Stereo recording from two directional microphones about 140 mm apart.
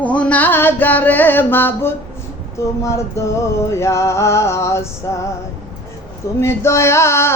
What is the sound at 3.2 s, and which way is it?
Music, 20° left (ahead or behind).